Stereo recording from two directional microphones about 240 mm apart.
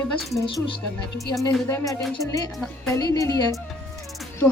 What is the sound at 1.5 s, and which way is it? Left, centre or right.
Music, centre.